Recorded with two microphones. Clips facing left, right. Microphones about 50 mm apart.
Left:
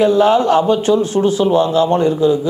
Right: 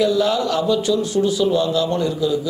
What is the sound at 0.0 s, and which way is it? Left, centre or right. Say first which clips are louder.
A man's voice: left 6 dB; left.